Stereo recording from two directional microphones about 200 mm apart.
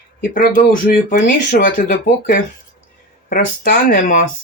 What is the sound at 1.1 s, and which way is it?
Speech, 50° left (ahead or behind).